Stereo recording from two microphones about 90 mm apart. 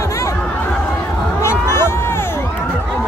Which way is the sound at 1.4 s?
30° left (ahead or behind).